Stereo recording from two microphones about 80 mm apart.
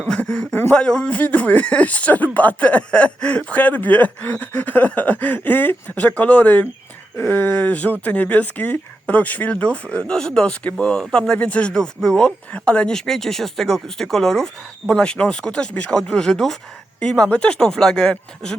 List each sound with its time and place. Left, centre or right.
0.1 s speech: centre
0.5 s speech: left
0.8 s speech: centre
17.0 s speech: centre